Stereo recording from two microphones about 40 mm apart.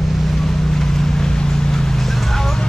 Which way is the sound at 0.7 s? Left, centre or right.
Centre.